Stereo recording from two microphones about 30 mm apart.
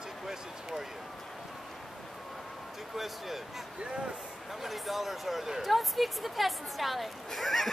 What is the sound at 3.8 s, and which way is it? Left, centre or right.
Speech, right.